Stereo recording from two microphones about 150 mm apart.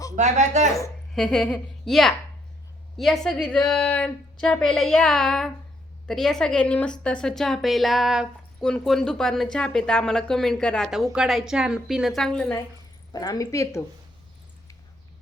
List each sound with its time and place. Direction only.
0.2 s speech: 50° right (ahead or behind)
1.1 s speech: centre (ahead or behind)
13.1 s speech: 25° left (ahead or behind)